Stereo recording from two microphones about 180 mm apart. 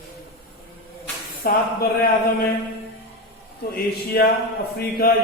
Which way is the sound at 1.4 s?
55° left (ahead or behind).